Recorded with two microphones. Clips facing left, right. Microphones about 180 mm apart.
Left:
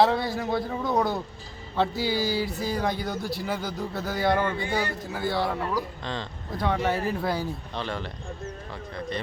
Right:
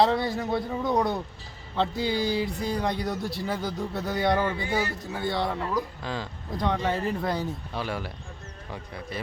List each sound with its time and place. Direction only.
0.0 s speech: centre (ahead or behind)
7.7 s speech: 10° right (ahead or behind)